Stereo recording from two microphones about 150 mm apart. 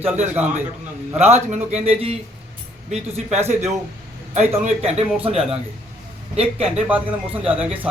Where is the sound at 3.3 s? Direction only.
50° right (ahead or behind).